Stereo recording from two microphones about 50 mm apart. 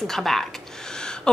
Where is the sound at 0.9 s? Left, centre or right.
Centre.